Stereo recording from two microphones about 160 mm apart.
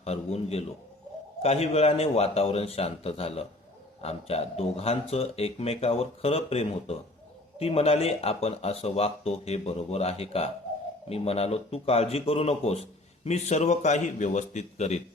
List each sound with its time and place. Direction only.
0.0 s speech: 40° left (ahead or behind)